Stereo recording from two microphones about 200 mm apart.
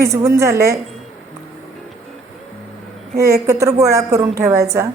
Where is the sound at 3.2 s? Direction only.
15° right (ahead or behind).